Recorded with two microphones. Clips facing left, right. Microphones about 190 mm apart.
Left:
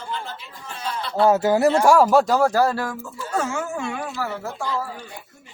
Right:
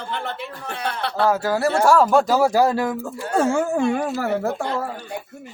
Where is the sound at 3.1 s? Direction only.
55° right (ahead or behind).